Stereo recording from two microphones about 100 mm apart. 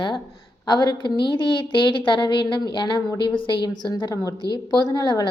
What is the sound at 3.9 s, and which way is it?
A woman's voice, 40° left (ahead or behind).